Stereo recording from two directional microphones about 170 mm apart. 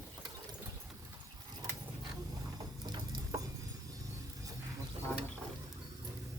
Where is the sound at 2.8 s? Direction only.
25° right (ahead or behind).